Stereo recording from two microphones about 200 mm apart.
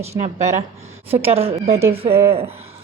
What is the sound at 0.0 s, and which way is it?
Speech, 30° right (ahead or behind).